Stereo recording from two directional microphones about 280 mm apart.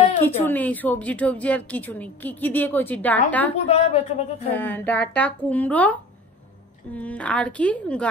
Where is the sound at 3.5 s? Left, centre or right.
Left.